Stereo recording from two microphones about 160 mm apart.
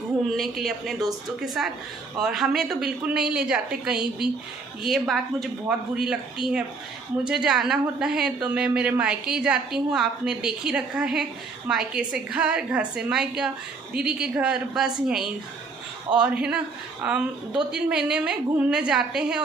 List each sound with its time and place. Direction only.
0.3 s a woman's voice: centre (ahead or behind)
7.2 s a woman's voice: 5° right (ahead or behind)